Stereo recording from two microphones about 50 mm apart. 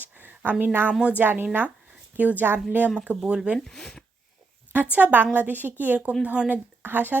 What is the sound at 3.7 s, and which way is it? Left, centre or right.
Speech, centre.